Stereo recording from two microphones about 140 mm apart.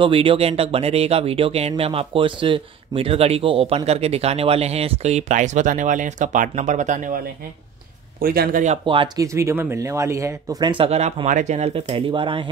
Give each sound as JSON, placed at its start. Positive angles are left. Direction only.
{"t": 0.0, "sound": "speech", "side_deg": -40}
{"t": 8.2, "sound": "speech", "side_deg": -90}
{"t": 8.8, "sound": "speech", "side_deg": -35}
{"t": 10.9, "sound": "speech", "side_deg": -50}